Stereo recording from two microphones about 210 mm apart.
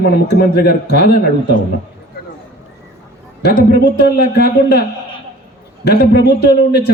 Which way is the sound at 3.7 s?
50° left (ahead or behind).